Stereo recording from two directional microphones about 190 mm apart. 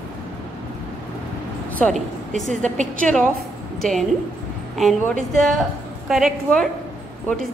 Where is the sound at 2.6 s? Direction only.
40° right (ahead or behind).